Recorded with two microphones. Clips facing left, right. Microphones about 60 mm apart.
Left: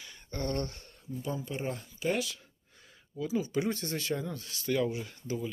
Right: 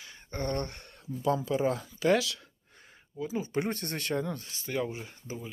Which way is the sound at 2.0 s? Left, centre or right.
Right.